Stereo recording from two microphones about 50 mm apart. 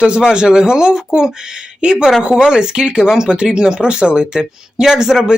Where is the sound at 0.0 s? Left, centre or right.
Centre.